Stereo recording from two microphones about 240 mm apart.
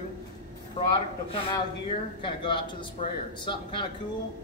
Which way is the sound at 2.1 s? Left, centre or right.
Centre.